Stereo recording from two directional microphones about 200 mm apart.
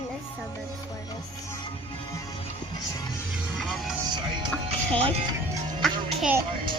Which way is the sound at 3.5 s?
Centre (ahead or behind).